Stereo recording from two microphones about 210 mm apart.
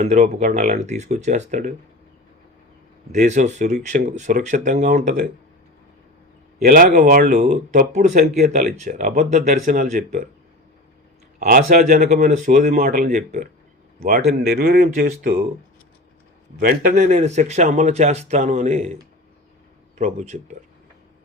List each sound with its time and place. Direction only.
0.0 s speech: 35° right (ahead or behind)
3.1 s speech: 35° right (ahead or behind)
6.7 s speech: 40° right (ahead or behind)
11.3 s speech: 40° right (ahead or behind)
16.6 s speech: 40° right (ahead or behind)
20.0 s speech: 35° right (ahead or behind)